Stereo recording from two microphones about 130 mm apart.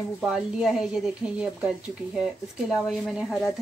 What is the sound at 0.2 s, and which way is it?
Speech, 5° right (ahead or behind).